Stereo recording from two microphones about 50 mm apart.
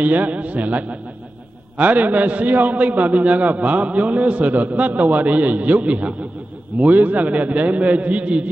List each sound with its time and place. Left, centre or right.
0.0 s a man's voice: right